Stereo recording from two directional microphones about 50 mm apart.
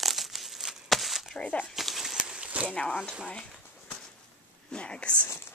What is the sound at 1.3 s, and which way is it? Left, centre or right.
Speech, left.